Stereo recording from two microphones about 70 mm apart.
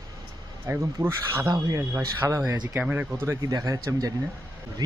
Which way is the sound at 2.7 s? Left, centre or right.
Right.